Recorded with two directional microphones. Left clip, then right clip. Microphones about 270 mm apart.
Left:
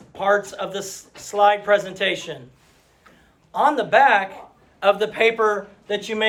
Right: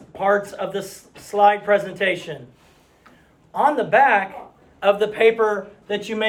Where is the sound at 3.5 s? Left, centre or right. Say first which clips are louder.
Even; centre.